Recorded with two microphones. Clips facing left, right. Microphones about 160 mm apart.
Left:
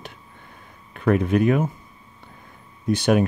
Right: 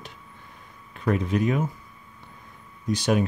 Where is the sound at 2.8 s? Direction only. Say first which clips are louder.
Left 4 dB; 60° left (ahead or behind).